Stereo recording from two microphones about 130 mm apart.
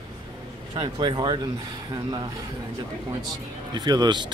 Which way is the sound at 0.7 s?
40° right (ahead or behind).